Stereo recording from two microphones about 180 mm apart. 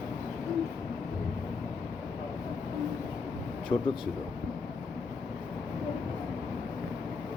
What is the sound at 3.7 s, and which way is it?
Speech, 30° left (ahead or behind).